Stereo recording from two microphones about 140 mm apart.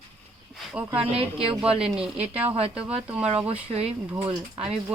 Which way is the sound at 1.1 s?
45° right (ahead or behind).